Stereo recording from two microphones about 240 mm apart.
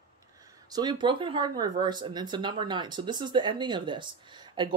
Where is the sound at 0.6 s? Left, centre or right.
Centre.